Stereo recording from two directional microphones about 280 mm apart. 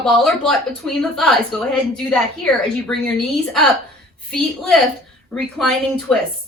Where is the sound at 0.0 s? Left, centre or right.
Centre.